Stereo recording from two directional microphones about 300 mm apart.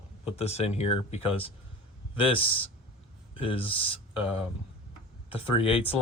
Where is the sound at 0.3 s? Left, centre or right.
Left.